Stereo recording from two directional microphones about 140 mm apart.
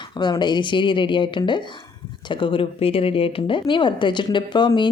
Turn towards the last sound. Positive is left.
turn(degrees=35)  # may be behind; listen again after turning